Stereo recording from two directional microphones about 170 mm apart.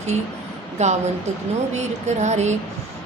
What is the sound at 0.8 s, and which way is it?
Speech, 40° right (ahead or behind).